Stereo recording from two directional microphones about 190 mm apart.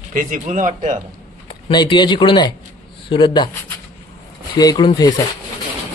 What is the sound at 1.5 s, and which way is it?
Speech, 25° left (ahead or behind).